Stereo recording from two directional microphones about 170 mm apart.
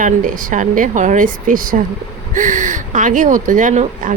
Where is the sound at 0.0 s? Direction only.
50° right (ahead or behind).